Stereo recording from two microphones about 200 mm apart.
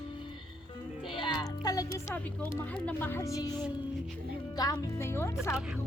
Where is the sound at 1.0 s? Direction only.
25° left (ahead or behind).